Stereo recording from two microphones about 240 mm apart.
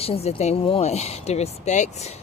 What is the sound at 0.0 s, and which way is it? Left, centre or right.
Speech, left.